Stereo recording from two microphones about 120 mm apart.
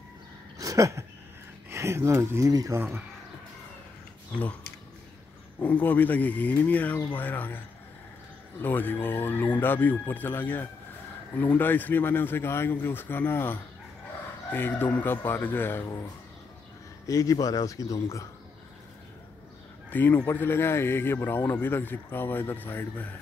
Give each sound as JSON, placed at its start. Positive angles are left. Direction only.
{"t": 0.6, "sound": "a sound", "side_deg": -25}
{"t": 1.7, "sound": "speech", "side_deg": -25}
{"t": 5.6, "sound": "a man's voice", "side_deg": 15}
{"t": 17.0, "sound": "speech", "side_deg": 30}
{"t": 19.9, "sound": "a man's voice", "side_deg": 15}